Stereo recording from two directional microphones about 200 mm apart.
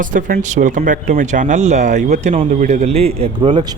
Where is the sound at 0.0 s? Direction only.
40° right (ahead or behind).